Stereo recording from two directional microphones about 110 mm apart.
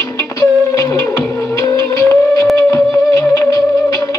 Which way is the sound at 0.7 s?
30° left (ahead or behind).